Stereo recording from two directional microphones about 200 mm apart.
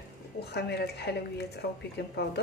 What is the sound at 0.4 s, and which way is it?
A woman's voice, 55° left (ahead or behind).